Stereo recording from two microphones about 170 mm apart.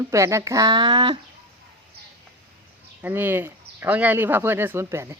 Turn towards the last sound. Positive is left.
turn(degrees=-15)  # may be behind; listen again after turning